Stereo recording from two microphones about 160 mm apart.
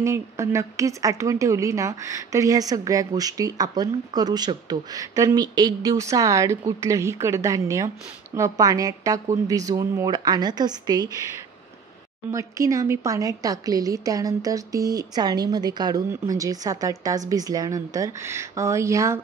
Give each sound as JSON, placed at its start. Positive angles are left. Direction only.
{"t": 0.0, "sound": "speech", "side_deg": -20}
{"t": 12.3, "sound": "speech", "side_deg": -20}